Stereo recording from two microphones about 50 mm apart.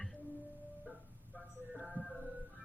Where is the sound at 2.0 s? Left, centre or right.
Right.